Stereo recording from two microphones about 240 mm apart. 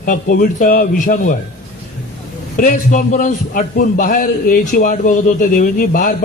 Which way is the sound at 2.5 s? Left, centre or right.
Left.